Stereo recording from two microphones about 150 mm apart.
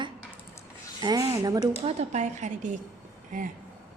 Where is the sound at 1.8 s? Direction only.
50° right (ahead or behind).